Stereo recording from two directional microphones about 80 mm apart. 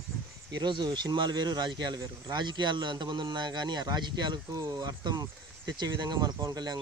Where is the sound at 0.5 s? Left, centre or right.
Right.